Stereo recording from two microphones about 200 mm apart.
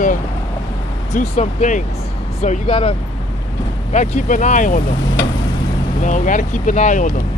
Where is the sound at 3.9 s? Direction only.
35° left (ahead or behind).